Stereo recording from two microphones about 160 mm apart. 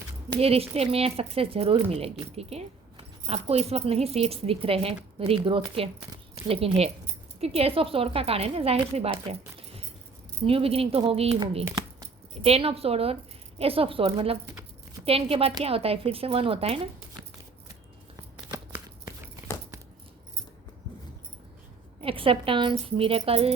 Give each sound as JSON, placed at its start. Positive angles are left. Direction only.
{"t": 0.3, "sound": "speech", "side_deg": -40}
{"t": 22.0, "sound": "speech", "side_deg": -35}